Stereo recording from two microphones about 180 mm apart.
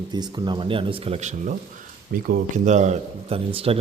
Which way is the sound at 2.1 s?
50° right (ahead or behind).